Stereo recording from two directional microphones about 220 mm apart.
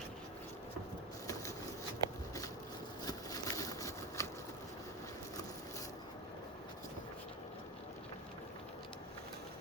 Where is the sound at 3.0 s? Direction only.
15° left (ahead or behind).